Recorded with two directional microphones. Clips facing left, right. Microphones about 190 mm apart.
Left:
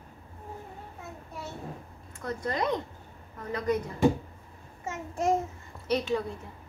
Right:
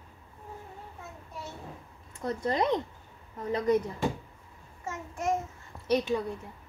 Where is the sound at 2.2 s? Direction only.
25° right (ahead or behind).